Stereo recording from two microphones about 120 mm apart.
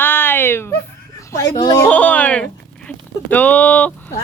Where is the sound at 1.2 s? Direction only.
30° left (ahead or behind).